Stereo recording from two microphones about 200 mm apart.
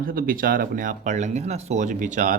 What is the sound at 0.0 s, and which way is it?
Speech, 45° right (ahead or behind).